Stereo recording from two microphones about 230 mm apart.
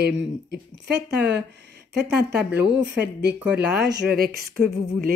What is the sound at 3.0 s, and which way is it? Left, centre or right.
Speech, right.